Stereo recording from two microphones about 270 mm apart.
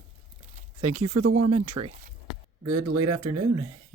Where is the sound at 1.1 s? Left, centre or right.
Right.